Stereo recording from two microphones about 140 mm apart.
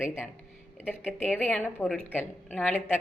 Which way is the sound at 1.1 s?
10° left (ahead or behind).